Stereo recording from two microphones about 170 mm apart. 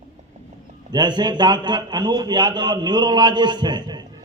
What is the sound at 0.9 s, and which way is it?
A man's voice, 25° right (ahead or behind).